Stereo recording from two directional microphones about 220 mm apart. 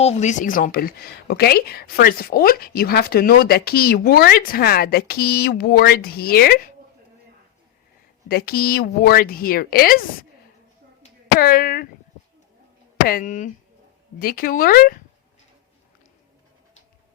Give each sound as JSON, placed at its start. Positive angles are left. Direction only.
{"t": 0.0, "sound": "speech", "side_deg": 30}
{"t": 8.3, "sound": "speech", "side_deg": 45}
{"t": 11.3, "sound": "speech", "side_deg": 40}
{"t": 13.1, "sound": "speech", "side_deg": 40}